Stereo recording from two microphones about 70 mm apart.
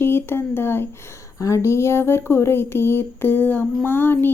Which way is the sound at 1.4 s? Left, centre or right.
Left.